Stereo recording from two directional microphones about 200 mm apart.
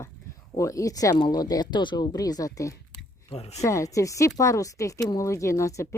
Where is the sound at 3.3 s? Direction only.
30° left (ahead or behind).